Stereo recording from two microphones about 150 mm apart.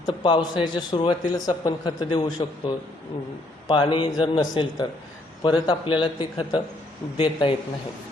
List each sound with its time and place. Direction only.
0.0 s a man's voice: 30° left (ahead or behind)